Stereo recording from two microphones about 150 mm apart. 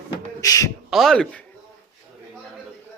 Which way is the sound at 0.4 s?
25° left (ahead or behind).